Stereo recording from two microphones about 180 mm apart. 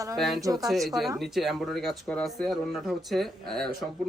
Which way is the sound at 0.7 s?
Centre (ahead or behind).